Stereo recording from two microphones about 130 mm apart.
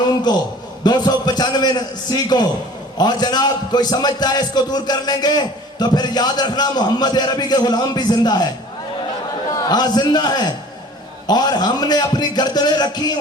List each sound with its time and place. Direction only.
0.3 s a man's voice: 35° left (ahead or behind)
9.5 s a man's voice: 30° left (ahead or behind)